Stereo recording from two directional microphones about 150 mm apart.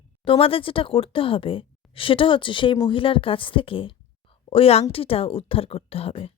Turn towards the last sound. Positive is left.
turn(degrees=40)  # may be behind; listen again after turning